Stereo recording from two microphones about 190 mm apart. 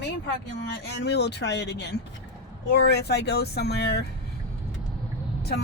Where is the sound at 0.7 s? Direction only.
60° left (ahead or behind).